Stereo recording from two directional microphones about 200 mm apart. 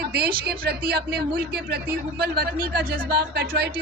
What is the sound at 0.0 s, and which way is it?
A woman's voice, 50° right (ahead or behind).